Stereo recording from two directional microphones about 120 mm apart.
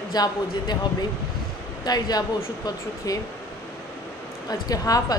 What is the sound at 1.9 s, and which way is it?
Speech, 35° left (ahead or behind).